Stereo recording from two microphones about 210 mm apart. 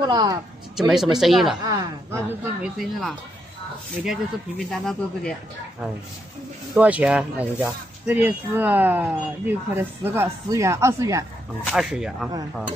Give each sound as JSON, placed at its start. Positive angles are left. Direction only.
{"t": 0.0, "sound": "a woman's voice", "side_deg": -20}
{"t": 0.7, "sound": "speech", "side_deg": 0}
{"t": 1.6, "sound": "speech", "side_deg": -15}
{"t": 2.6, "sound": "speech", "side_deg": 0}
{"t": 6.7, "sound": "speech", "side_deg": -5}
{"t": 11.6, "sound": "speech", "side_deg": 0}